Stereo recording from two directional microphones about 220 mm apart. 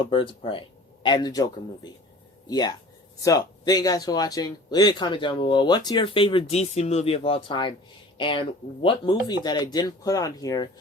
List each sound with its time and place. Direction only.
0.0 s speech: 25° left (ahead or behind)